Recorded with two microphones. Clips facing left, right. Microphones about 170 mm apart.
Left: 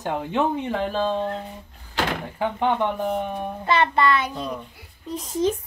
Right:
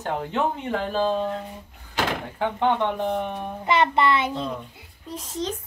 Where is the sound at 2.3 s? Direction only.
10° left (ahead or behind).